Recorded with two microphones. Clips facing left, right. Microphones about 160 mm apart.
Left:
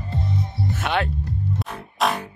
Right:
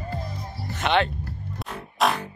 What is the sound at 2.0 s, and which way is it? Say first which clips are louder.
Music: even; centre (ahead or behind).